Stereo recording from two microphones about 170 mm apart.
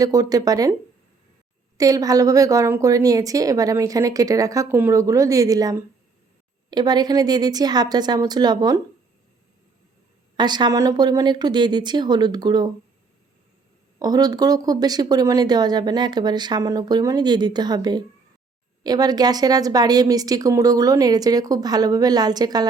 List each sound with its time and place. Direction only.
0.0 s speech: 20° right (ahead or behind)
1.8 s speech: 20° right (ahead or behind)
10.3 s speech: 25° right (ahead or behind)
14.0 s speech: 20° right (ahead or behind)